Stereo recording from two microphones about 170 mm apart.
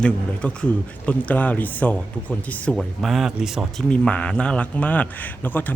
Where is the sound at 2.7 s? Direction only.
Centre (ahead or behind).